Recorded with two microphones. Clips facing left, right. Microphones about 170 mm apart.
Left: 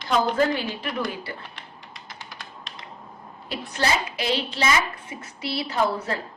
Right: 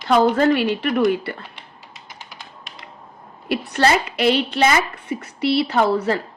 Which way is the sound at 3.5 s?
65° right (ahead or behind).